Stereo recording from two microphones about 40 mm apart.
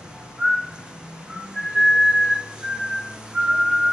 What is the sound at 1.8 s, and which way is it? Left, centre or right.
Whistling, centre.